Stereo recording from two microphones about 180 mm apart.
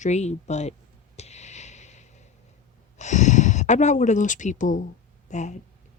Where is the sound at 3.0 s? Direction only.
40° left (ahead or behind).